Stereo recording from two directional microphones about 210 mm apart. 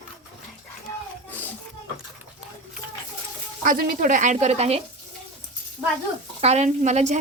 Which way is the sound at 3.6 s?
40° right (ahead or behind).